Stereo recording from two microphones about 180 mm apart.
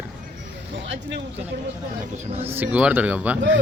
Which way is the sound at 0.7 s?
80° right.